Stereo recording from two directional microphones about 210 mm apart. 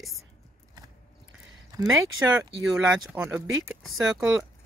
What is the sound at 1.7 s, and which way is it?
Speech, 20° right (ahead or behind).